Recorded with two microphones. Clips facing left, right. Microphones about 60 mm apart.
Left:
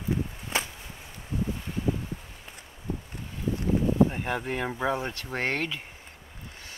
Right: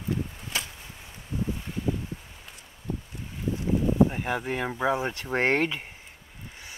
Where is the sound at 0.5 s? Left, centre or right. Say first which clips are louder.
Left 3 dB; left.